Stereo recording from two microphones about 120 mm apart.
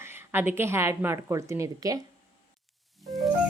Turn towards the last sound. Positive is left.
turn(degrees=0)  # may be behind; listen again after turning